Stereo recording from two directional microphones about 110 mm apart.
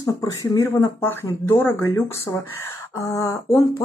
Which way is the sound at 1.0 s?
20° left (ahead or behind).